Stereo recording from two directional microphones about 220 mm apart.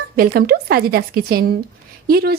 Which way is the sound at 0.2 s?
45° right (ahead or behind).